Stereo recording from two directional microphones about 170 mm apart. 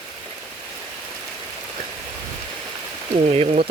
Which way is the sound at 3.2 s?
35° right (ahead or behind).